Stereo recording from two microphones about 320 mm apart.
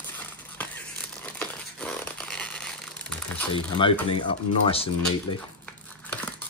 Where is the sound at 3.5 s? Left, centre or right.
Centre.